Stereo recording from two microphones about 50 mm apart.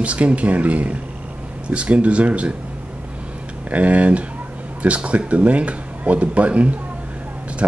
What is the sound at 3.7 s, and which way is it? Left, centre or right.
Speech, right.